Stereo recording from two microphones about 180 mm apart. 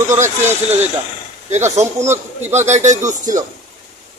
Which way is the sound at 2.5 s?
40° right (ahead or behind).